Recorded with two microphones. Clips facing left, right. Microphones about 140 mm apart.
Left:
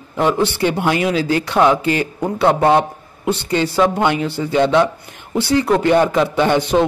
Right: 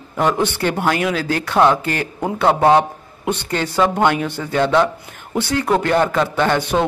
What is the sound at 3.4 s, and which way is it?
A man's voice, 10° left (ahead or behind).